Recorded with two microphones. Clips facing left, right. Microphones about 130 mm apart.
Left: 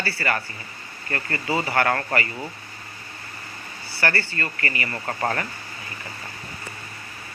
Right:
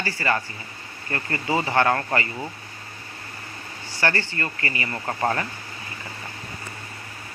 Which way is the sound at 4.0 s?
20° right (ahead or behind).